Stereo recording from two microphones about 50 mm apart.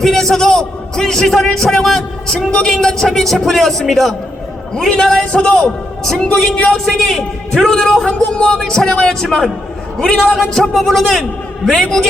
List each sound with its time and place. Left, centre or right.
0.0 s a man's voice: centre
5.5 s a man's voice: centre
8.4 s speech: left
8.6 s a man's voice: centre
10.2 s a man's voice: centre